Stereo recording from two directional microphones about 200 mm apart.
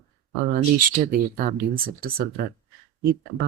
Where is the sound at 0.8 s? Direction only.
45° right (ahead or behind).